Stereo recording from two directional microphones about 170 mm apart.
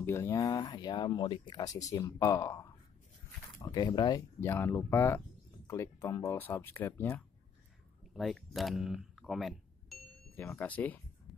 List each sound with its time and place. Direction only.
0.0 s speech: 15° left (ahead or behind)
3.7 s speech: 25° left (ahead or behind)
4.4 s speech: 15° left (ahead or behind)
8.1 s speech: centre (ahead or behind)
10.3 s speech: 10° left (ahead or behind)